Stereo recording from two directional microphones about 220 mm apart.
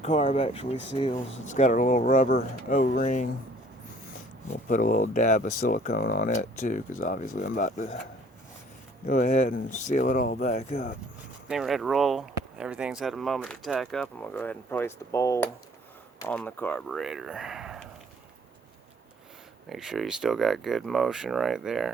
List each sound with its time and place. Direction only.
0.0 s speech: 30° left (ahead or behind)
1.5 s speech: 35° left (ahead or behind)
4.5 s speech: 35° left (ahead or behind)
9.0 s speech: 35° left (ahead or behind)
11.4 s speech: centre (ahead or behind)
19.7 s speech: centre (ahead or behind)